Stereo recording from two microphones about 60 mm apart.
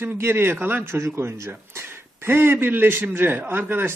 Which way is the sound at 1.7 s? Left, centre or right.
Right.